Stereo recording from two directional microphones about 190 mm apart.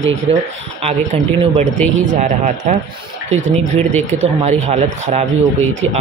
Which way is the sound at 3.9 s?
35° right (ahead or behind).